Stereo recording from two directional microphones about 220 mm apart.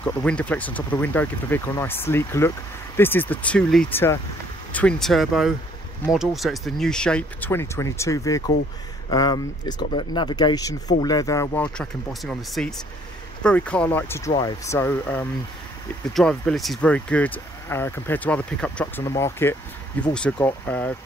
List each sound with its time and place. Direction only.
0.0 s speech: 5° left (ahead or behind)